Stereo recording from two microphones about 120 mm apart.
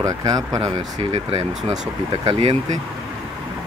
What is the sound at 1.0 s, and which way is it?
Speech, 55° right (ahead or behind).